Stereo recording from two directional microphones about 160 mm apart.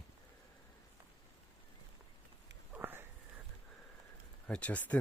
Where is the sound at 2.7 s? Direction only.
15° right (ahead or behind).